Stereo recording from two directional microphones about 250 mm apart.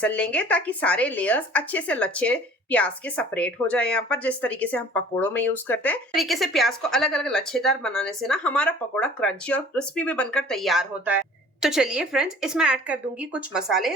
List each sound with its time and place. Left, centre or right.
0.0 s speech: centre